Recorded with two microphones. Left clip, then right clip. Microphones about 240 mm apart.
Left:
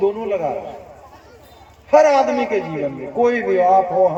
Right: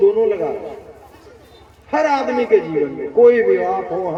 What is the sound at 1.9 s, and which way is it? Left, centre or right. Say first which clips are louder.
A man's voice: left 4 dB; left.